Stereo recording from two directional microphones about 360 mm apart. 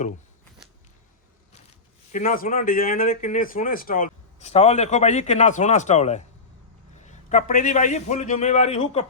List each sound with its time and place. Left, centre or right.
2.1 s speech: left